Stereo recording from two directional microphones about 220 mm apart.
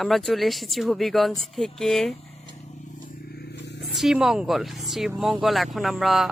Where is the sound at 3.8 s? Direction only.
Centre (ahead or behind).